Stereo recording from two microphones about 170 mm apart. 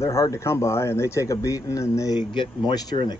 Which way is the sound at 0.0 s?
15° left (ahead or behind).